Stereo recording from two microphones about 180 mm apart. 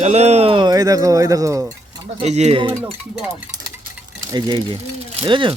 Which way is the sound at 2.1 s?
35° right (ahead or behind).